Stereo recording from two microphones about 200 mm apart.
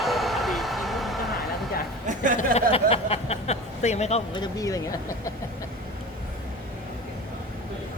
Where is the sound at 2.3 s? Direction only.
30° left (ahead or behind).